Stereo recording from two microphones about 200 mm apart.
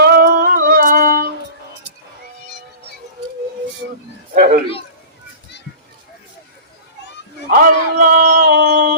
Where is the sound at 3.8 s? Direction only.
60° right (ahead or behind).